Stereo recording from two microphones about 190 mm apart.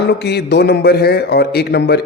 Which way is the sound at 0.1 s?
60° left (ahead or behind).